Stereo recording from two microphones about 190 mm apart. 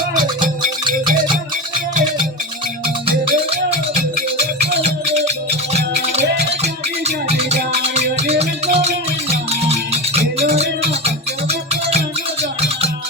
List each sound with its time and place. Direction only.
0.4 s music: 45° right (ahead or behind)
3.2 s music: 35° right (ahead or behind)